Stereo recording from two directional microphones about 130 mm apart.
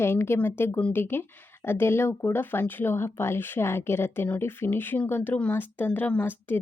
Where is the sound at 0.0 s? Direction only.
20° left (ahead or behind).